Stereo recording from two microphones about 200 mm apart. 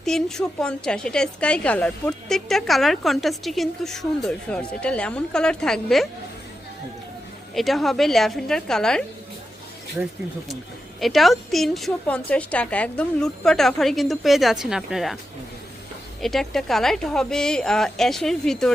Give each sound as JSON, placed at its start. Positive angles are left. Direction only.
{"t": 0.0, "sound": "a woman's voice", "side_deg": 0}
{"t": 7.5, "sound": "a woman's voice", "side_deg": 0}
{"t": 11.0, "sound": "a woman's voice", "side_deg": 0}
{"t": 16.2, "sound": "a woman's voice", "side_deg": 0}